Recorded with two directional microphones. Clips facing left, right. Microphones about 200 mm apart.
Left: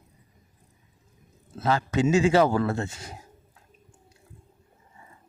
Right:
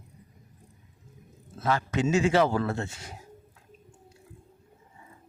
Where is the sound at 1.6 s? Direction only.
30° left (ahead or behind).